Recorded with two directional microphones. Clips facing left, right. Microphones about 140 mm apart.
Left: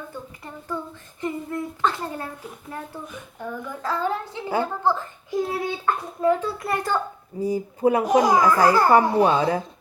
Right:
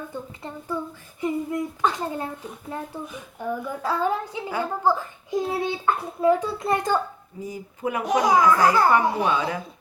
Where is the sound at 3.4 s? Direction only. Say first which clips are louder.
Right 4 dB; 10° right (ahead or behind).